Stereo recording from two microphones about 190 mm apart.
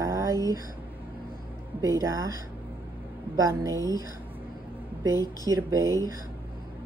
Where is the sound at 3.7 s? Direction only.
20° left (ahead or behind).